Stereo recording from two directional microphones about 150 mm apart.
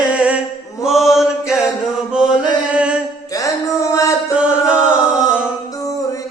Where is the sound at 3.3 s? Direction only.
20° left (ahead or behind).